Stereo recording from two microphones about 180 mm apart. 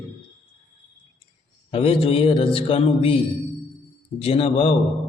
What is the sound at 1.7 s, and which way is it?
A man's voice, 30° left (ahead or behind).